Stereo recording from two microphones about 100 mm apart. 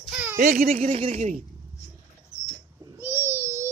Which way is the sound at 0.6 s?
75° right (ahead or behind).